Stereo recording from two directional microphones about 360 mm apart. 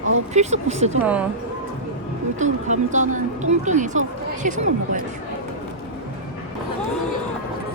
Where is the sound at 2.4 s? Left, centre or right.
Centre.